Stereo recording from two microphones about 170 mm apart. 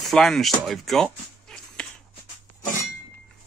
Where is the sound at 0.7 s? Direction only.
Centre (ahead or behind).